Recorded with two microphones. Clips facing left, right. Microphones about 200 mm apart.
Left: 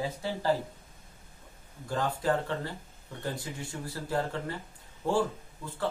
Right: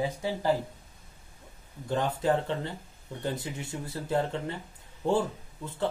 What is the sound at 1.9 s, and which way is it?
Speech, 20° right (ahead or behind).